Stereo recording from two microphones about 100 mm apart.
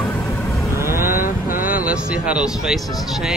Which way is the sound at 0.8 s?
25° right (ahead or behind).